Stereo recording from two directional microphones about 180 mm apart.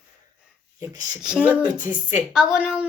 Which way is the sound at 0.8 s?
20° right (ahead or behind).